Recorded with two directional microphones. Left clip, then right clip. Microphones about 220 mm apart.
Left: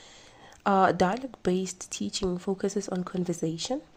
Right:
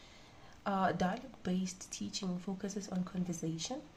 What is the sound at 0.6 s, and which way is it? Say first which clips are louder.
Speech: left 11 dB; 45° left (ahead or behind).